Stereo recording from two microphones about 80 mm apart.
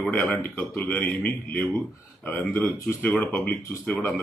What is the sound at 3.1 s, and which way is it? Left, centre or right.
Speech, centre.